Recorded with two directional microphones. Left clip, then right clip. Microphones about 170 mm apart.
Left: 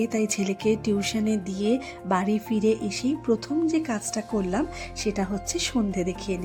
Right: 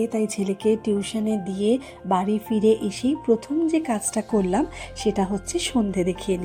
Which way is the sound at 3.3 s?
15° left (ahead or behind).